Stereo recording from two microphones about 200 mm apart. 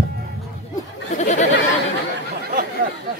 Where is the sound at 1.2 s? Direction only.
35° left (ahead or behind).